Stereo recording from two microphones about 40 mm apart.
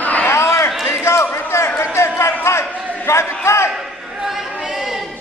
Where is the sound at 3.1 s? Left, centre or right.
Left.